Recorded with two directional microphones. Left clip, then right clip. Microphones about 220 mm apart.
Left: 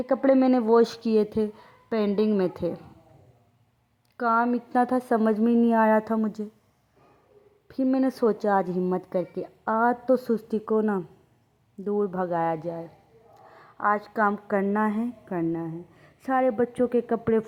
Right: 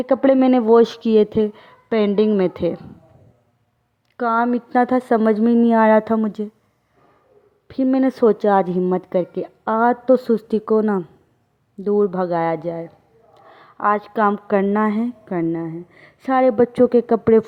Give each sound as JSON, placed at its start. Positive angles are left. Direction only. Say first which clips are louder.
{"t": 0.3, "sound": "speech", "louder": "right 6 dB", "side_deg": -30}
{"t": 4.2, "sound": "a woman's voice", "louder": "right 5 dB", "side_deg": -30}
{"t": 7.7, "sound": "a woman's voice", "louder": "right 6 dB", "side_deg": -30}
{"t": 13.5, "sound": "a sound", "louder": "right 6 dB", "side_deg": -30}
{"t": 14.0, "sound": "a woman's voice", "louder": "right 6 dB", "side_deg": -35}
{"t": 14.3, "sound": "a woman's voice", "louder": "right 9 dB", "side_deg": -50}
{"t": 14.6, "sound": "a woman's voice", "louder": "right 7 dB", "side_deg": -35}